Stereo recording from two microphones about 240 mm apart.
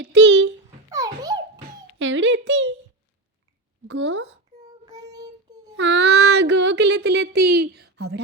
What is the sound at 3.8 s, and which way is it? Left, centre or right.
Speech, right.